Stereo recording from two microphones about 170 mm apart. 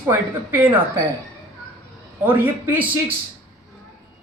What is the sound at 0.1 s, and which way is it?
Speech, 10° right (ahead or behind).